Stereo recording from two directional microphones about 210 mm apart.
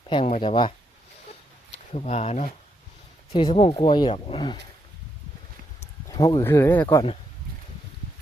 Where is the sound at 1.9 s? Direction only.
30° left (ahead or behind).